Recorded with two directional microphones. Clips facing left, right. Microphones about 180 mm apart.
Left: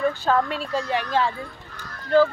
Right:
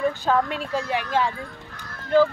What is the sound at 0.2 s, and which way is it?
A woman's voice, 15° right (ahead or behind).